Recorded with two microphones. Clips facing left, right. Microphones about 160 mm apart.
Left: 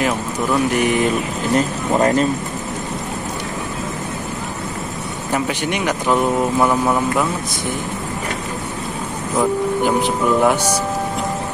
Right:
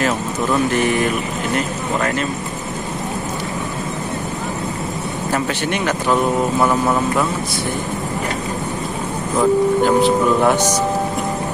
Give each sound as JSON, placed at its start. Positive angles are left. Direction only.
{"t": 0.0, "sound": "speech", "side_deg": 15}
{"t": 2.0, "sound": "speech", "side_deg": 30}
{"t": 5.3, "sound": "speech", "side_deg": 15}
{"t": 9.4, "sound": "speech", "side_deg": 15}